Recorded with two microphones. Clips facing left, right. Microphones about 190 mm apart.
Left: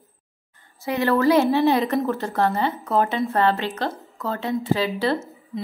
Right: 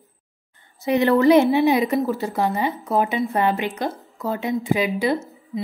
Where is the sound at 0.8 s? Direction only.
20° right (ahead or behind).